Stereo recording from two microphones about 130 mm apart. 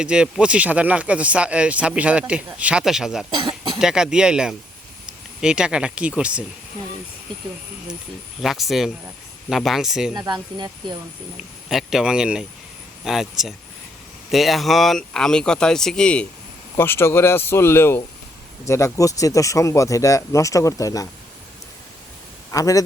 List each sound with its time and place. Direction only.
0.0 s speech: 5° right (ahead or behind)
3.2 s a sound: 35° right (ahead or behind)
3.8 s speech: 5° right (ahead or behind)
8.4 s speech: centre (ahead or behind)
10.2 s speech: 35° right (ahead or behind)
11.3 s speech: centre (ahead or behind)
16.7 s speech: 15° left (ahead or behind)
22.5 s speech: 25° left (ahead or behind)